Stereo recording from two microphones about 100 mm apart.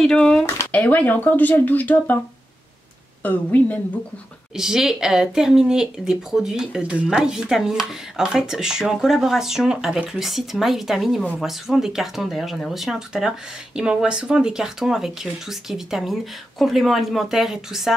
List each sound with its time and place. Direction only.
0.0 s speech: 10° left (ahead or behind)
3.2 s speech: 15° left (ahead or behind)
4.6 s speech: 5° right (ahead or behind)